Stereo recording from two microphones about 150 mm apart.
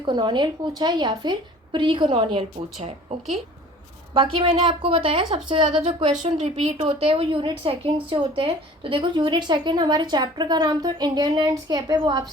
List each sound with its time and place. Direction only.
0.0 s a woman's voice: 30° right (ahead or behind)
4.1 s a woman's voice: 35° right (ahead or behind)